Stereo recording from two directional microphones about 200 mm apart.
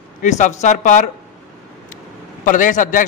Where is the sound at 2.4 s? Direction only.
40° left (ahead or behind).